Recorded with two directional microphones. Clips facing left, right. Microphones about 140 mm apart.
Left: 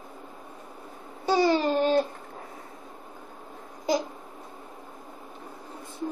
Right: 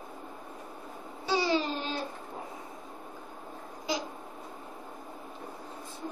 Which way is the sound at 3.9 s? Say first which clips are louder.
Left 8 dB; 45° left (ahead or behind).